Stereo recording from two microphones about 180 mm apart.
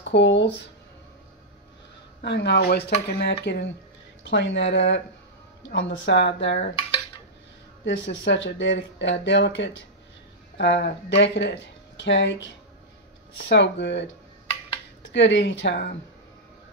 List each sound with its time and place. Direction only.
0.0 s speech: 80° left
2.2 s speech: 70° left (ahead or behind)
7.8 s speech: 80° left
15.1 s speech: 80° left